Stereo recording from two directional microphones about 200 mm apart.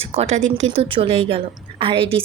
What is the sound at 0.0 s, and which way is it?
Speech, 30° right (ahead or behind).